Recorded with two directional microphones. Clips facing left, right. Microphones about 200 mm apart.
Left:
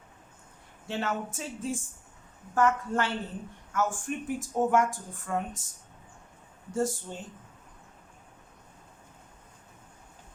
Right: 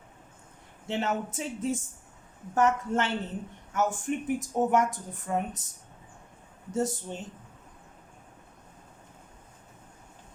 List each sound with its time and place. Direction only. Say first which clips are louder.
0.9 s speech: right 2 dB; 20° right (ahead or behind)
6.7 s speech: even; 20° right (ahead or behind)